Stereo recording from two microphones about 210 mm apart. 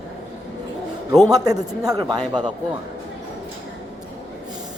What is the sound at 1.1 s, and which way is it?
Speech, centre (ahead or behind).